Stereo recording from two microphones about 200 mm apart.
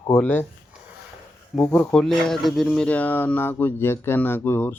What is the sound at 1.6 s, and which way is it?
Speech, 5° left (ahead or behind).